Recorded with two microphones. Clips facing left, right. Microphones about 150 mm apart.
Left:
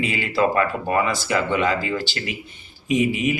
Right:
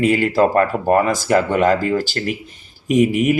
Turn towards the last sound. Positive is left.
turn(degrees=-50)  # may be behind; listen again after turning